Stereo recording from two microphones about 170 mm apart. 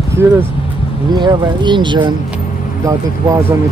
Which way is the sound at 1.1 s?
25° right (ahead or behind).